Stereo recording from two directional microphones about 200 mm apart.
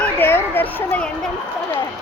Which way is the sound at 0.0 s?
10° left (ahead or behind).